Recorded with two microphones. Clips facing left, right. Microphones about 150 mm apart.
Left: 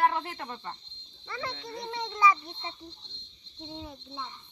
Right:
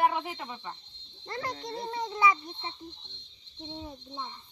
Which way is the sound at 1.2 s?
45° right (ahead or behind).